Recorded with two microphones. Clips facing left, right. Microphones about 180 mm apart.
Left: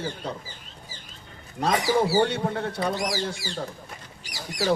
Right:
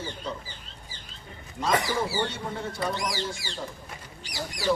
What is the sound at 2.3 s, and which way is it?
Speech, 65° left (ahead or behind).